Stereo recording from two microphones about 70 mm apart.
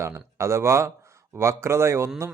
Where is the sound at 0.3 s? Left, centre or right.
Right.